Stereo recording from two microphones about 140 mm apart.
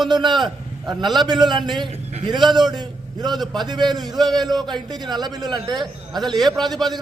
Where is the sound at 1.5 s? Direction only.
30° right (ahead or behind).